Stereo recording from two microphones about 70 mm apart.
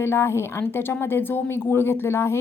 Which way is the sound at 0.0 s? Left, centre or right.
Left.